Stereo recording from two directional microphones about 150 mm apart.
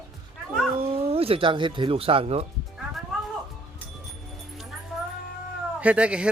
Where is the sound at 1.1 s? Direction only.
40° right (ahead or behind).